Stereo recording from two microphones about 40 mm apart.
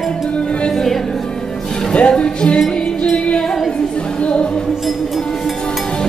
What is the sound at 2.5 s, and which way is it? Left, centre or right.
Music, centre.